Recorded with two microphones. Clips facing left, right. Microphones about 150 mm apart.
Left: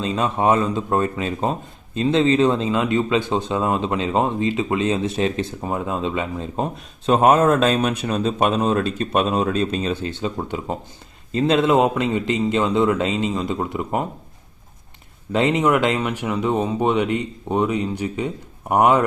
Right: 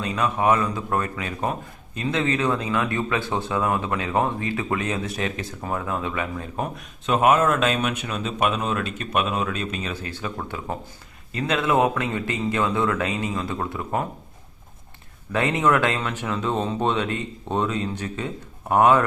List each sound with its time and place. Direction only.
0.0 s speech: 25° left (ahead or behind)
15.3 s speech: 20° left (ahead or behind)